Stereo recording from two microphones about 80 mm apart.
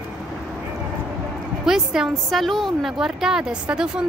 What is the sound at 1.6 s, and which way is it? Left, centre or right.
A woman's voice, centre.